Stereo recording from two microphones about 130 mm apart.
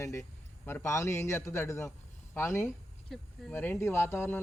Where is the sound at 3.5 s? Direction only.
15° left (ahead or behind).